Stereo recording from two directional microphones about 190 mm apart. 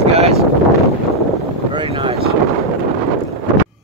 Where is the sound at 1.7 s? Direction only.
25° right (ahead or behind).